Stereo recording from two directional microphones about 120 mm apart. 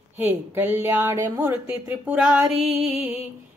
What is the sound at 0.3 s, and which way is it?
A woman's voice, 15° right (ahead or behind).